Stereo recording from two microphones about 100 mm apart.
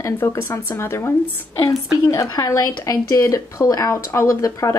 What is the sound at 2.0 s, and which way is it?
Speech, 35° left (ahead or behind).